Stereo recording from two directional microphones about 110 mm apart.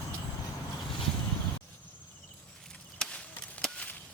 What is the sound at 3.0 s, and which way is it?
Chop, 5° left (ahead or behind).